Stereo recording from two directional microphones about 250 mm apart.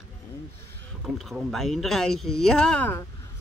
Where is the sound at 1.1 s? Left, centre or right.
Centre.